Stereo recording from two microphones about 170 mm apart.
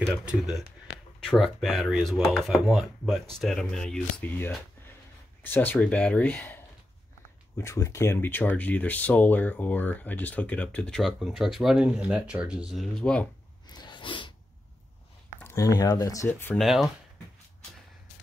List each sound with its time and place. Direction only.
0.0 s speech: 5° right (ahead or behind)
13.7 s sneeze: 25° left (ahead or behind)
15.4 s speech: 20° left (ahead or behind)
16.5 s speech: centre (ahead or behind)